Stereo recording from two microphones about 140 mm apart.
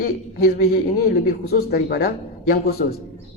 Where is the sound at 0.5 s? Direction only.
90° left.